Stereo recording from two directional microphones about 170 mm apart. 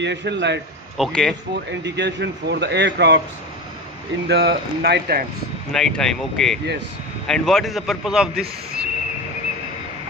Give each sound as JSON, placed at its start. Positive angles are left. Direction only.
{"t": 0.0, "sound": "a man's voice", "side_deg": -90}
{"t": 0.9, "sound": "speech", "side_deg": 0}
{"t": 1.8, "sound": "a man's voice", "side_deg": -90}
{"t": 4.3, "sound": "speech", "side_deg": -80}
{"t": 5.7, "sound": "speech", "side_deg": 5}